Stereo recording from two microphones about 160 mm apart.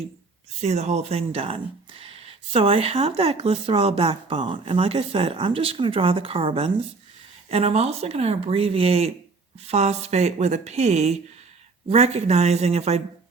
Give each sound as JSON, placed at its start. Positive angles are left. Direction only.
{"t": 0.6, "sound": "speech", "side_deg": -45}